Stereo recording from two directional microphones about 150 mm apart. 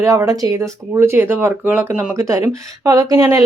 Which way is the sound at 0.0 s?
20° right (ahead or behind).